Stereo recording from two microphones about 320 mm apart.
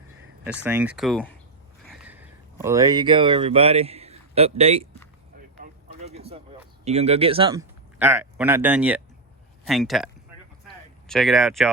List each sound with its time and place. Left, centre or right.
0.4 s speech: centre
6.0 s a sound: centre
6.8 s speech: centre
7.9 s speech: centre
11.1 s speech: centre